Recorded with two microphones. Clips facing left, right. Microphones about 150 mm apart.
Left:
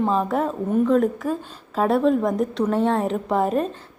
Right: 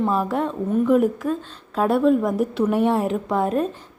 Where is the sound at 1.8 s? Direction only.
Centre (ahead or behind).